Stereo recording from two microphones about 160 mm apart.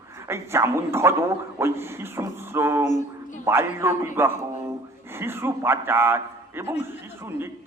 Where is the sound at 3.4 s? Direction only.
15° right (ahead or behind).